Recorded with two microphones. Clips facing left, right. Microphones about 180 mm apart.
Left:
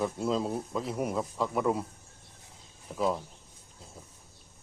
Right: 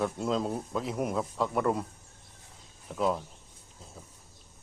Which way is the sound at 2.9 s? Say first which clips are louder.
Right 1 dB; centre (ahead or behind).